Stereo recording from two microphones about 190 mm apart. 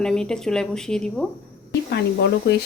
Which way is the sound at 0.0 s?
5° left (ahead or behind).